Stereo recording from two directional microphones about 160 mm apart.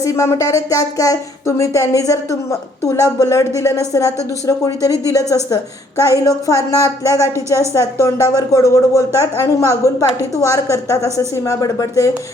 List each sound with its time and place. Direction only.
0.0 s speech: 15° left (ahead or behind)